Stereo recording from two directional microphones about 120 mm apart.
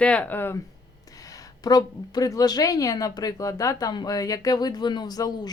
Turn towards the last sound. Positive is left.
turn(degrees=35)  # may be behind; listen again after turning